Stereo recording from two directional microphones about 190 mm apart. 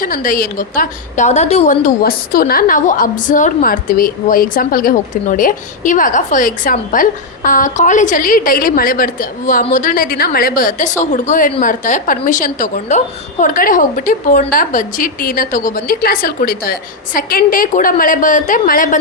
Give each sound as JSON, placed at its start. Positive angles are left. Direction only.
{"t": 0.0, "sound": "a woman's voice", "side_deg": 45}